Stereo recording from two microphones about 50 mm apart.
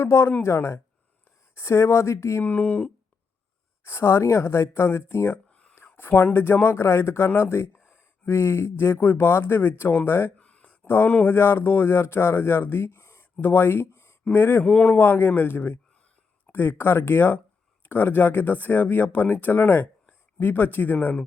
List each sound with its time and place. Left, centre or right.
0.0 s speech: left
0.4 s speech: left
2.4 s speech: left
3.8 s speech: left
5.5 s a sound: left
5.7 s a sound: left
6.3 s speech: left
10.3 s a sound: left
10.8 s speech: left
14.3 s speech: left
14.6 s speech: left
14.9 s speech: left